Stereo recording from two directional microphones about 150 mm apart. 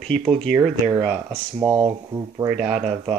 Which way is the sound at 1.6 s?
30° right (ahead or behind).